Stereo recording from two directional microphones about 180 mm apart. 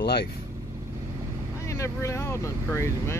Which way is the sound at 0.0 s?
65° left (ahead or behind).